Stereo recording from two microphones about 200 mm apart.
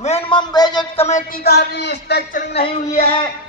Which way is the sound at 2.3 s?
30° left (ahead or behind).